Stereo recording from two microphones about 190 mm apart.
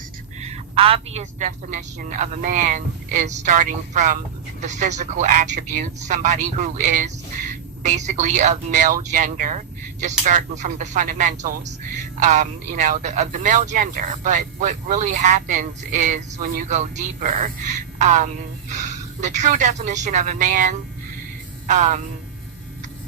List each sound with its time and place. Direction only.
0.3 s speech: 35° right (ahead or behind)